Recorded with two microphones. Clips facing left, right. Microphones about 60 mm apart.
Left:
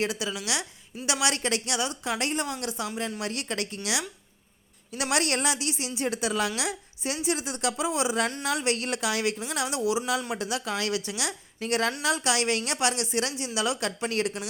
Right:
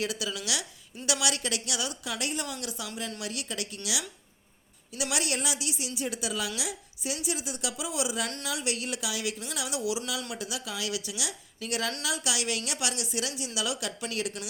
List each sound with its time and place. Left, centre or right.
0.0 s a woman's voice: left
5.1 s a woman's voice: left
9.6 s a woman's voice: left